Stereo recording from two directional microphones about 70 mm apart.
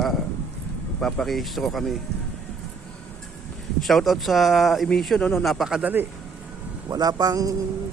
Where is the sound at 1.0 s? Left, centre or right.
Centre.